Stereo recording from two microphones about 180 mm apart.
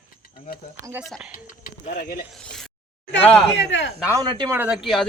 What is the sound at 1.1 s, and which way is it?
Speech, centre (ahead or behind).